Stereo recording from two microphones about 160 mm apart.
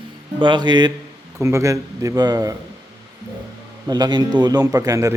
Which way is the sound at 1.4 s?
15° right (ahead or behind).